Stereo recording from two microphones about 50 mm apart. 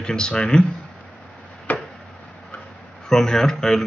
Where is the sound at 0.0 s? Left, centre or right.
Centre.